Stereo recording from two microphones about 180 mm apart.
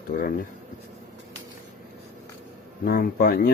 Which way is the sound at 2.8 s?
55° left (ahead or behind).